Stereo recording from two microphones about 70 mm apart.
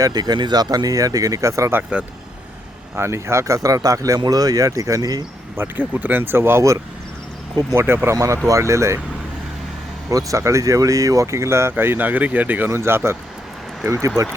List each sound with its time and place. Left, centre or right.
0.0 s speech: right
3.0 s speech: right
5.5 s speech: right
8.1 s speech: right
10.1 s speech: right
12.7 s speech: right